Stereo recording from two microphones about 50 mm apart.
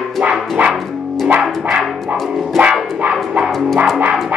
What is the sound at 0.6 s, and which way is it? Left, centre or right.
Music, right.